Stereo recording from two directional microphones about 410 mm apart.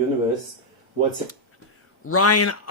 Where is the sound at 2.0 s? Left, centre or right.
Left.